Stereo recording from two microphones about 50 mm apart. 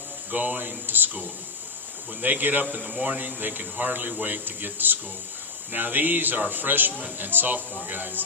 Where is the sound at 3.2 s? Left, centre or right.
Right.